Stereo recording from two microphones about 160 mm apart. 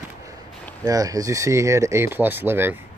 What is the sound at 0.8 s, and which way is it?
Speech, 20° right (ahead or behind).